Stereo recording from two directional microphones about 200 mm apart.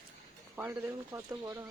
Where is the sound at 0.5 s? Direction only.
10° right (ahead or behind).